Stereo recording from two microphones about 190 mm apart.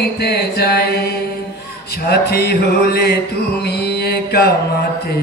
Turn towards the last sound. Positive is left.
turn(degrees=60)  # may be behind; listen again after turning